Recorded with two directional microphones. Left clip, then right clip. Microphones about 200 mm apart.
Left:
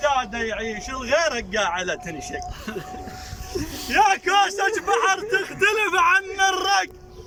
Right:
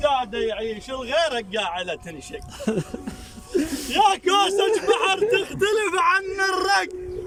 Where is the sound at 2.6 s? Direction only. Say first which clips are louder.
Right 6 dB; 40° right (ahead or behind).